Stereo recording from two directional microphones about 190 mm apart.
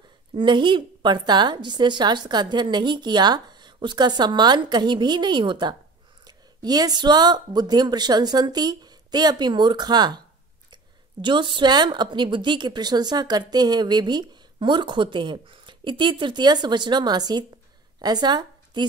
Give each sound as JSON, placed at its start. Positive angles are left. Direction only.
{"t": 0.3, "sound": "a woman's voice", "side_deg": -25}